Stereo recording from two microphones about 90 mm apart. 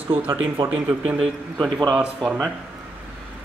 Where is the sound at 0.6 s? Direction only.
60° right (ahead or behind).